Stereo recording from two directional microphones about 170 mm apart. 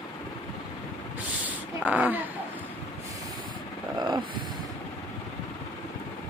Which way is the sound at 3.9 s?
25° right (ahead or behind).